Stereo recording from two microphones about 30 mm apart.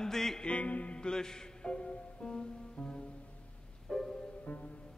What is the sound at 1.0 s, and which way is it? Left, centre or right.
Music, left.